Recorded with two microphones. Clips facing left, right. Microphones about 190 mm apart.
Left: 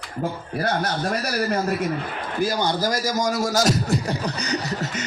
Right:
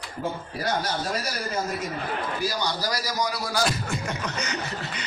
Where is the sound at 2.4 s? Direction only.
50° left (ahead or behind).